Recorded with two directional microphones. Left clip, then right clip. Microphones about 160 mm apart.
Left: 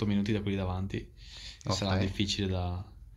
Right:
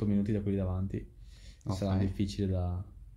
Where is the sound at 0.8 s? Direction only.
25° right (ahead or behind).